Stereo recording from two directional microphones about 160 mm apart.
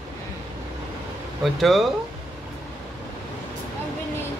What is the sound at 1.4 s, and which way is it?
Speech, centre (ahead or behind).